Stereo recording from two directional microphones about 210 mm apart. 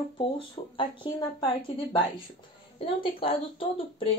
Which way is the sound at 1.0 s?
25° left (ahead or behind).